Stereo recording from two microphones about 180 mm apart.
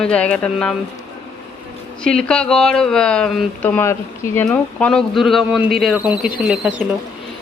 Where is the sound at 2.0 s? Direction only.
5° left (ahead or behind).